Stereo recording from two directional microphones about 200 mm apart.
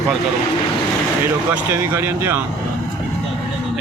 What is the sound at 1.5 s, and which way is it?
Speech, 10° right (ahead or behind).